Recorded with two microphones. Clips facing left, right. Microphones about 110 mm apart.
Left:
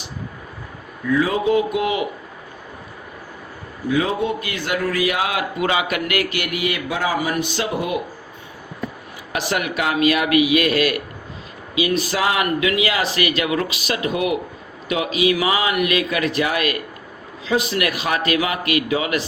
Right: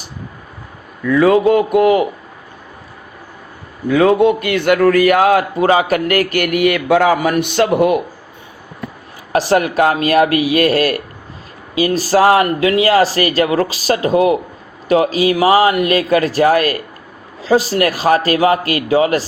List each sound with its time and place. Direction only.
1.1 s a man's voice: 70° right (ahead or behind); by 2.0 s 50° right (ahead or behind)
3.8 s a man's voice: 65° right (ahead or behind)
9.3 s speech: 35° right (ahead or behind)